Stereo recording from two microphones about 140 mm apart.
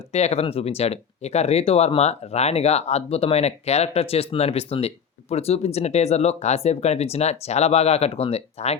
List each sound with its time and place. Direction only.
0.1 s speech: 50° left (ahead or behind)